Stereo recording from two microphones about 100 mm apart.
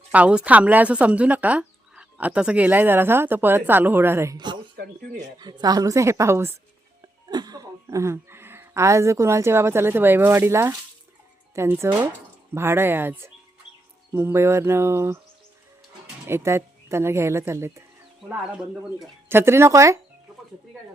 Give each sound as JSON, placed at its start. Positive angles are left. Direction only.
{"t": 0.1, "sound": "speech", "side_deg": -15}
{"t": 5.4, "sound": "a woman's voice", "side_deg": -45}
{"t": 7.3, "sound": "speech", "side_deg": -45}
{"t": 16.2, "sound": "speech", "side_deg": -25}
{"t": 19.3, "sound": "speech", "side_deg": -25}